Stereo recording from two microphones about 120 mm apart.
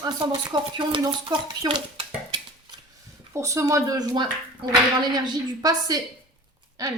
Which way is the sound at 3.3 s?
25° right (ahead or behind).